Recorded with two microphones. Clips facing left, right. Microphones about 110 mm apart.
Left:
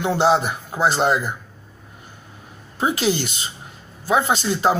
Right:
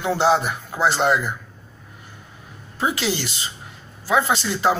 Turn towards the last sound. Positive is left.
turn(degrees=30)  # may be behind; listen again after turning